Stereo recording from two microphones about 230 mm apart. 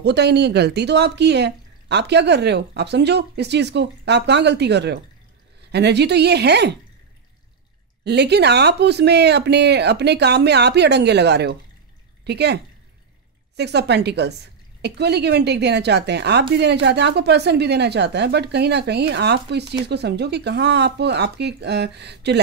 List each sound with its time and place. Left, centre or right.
0.0 s speech: right
8.0 s speech: right
13.6 s speech: right